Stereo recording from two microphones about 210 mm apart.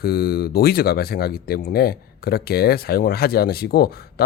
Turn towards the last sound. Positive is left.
turn(degrees=50)  # may be behind; listen again after turning